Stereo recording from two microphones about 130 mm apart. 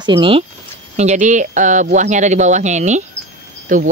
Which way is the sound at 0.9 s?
60° right (ahead or behind).